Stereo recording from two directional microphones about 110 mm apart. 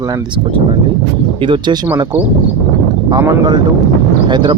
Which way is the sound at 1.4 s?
50° right (ahead or behind).